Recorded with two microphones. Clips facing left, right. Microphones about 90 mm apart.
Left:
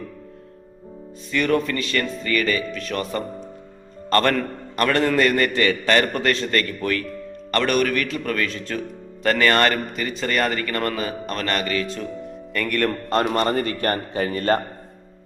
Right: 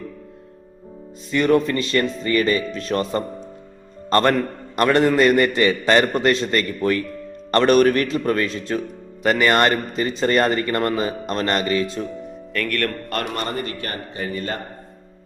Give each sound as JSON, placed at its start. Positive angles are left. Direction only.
{"t": 1.3, "sound": "a man's voice", "side_deg": -25}
{"t": 4.1, "sound": "a man's voice", "side_deg": -20}
{"t": 12.5, "sound": "speech", "side_deg": 10}
{"t": 13.1, "sound": "a man's voice", "side_deg": 30}
{"t": 13.7, "sound": "a man's voice", "side_deg": 45}